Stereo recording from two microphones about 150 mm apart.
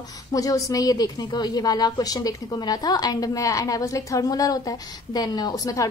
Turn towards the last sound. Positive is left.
turn(degrees=25)  # may be behind; listen again after turning